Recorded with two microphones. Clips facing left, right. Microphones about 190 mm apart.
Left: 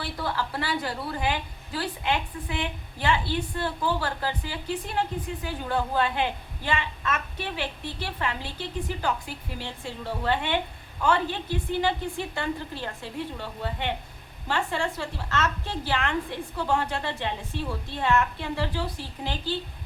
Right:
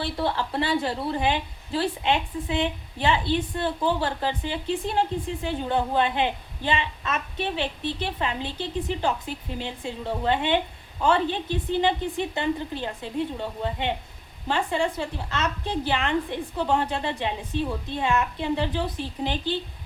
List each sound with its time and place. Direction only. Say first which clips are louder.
0.0 s a woman's voice: right 4 dB; 25° right (ahead or behind)